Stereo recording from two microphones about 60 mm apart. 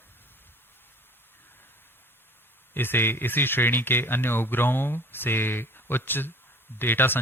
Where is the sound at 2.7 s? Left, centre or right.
Left.